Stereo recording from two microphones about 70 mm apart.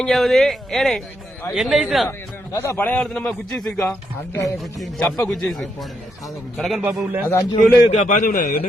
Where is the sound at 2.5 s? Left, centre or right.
Left.